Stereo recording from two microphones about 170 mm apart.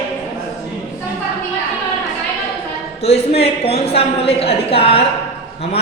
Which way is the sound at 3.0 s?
35° left (ahead or behind).